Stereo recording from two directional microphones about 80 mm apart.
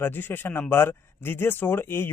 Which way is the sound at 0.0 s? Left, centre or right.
Left.